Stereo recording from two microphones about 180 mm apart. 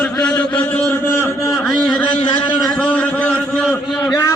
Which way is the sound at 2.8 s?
10° left (ahead or behind).